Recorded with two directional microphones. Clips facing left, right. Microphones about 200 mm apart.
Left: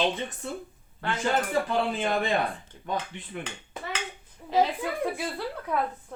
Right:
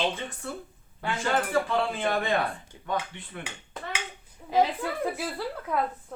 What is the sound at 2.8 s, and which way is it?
Speech, 20° left (ahead or behind).